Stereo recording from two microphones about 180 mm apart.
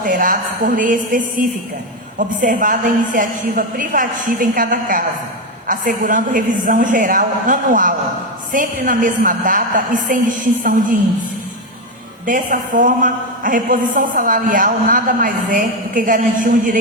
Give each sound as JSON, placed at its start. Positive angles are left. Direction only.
{"t": 0.0, "sound": "a woman's voice", "side_deg": -45}
{"t": 12.2, "sound": "a woman's voice", "side_deg": -45}